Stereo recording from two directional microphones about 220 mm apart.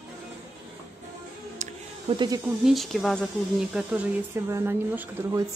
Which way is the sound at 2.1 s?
20° right (ahead or behind).